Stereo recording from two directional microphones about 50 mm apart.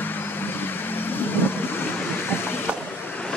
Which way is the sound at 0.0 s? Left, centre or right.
Left.